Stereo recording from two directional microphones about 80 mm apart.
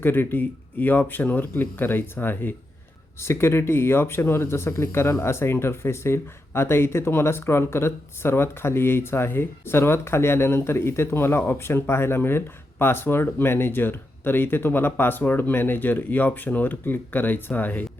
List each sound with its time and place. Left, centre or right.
0.0 s speech: left